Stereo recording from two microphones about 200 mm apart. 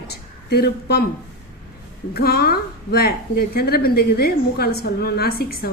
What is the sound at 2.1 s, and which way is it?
A woman's voice, 50° left (ahead or behind).